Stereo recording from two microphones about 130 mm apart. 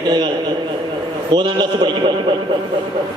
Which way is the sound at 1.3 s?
35° right (ahead or behind).